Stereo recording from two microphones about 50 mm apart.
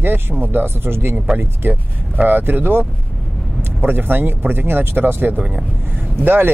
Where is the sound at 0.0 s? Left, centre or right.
Right.